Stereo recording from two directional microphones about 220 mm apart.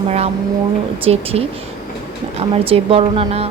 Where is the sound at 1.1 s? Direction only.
25° right (ahead or behind).